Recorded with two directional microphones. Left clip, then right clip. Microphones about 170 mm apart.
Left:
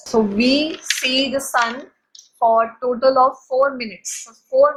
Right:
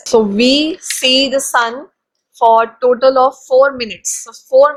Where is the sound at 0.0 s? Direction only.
50° right (ahead or behind).